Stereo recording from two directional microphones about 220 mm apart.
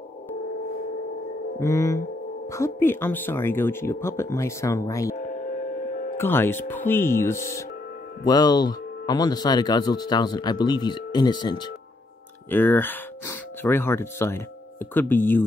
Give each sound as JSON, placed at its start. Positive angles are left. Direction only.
{"t": 1.6, "sound": "speech", "side_deg": 15}
{"t": 6.1, "sound": "speech", "side_deg": 10}
{"t": 12.4, "sound": "speech", "side_deg": 10}